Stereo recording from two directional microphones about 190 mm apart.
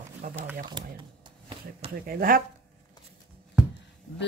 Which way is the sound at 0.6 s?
25° right (ahead or behind).